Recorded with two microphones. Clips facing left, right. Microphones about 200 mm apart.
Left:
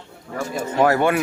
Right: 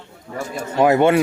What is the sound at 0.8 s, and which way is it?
Speech, 20° right (ahead or behind).